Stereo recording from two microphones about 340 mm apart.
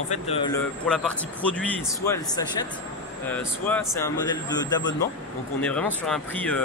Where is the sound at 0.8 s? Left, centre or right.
Centre.